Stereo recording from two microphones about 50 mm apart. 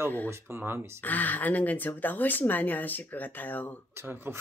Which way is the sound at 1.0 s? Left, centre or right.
Left.